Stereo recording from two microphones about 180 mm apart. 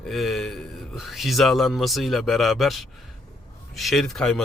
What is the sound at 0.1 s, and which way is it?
A man's voice, centre (ahead or behind).